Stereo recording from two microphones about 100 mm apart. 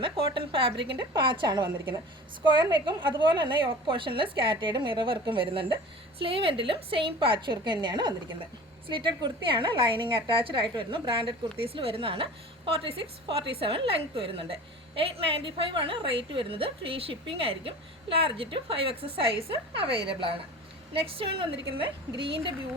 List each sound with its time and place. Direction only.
0.3 s a woman's voice: 60° right (ahead or behind)
21.0 s a woman's voice: 65° right (ahead or behind)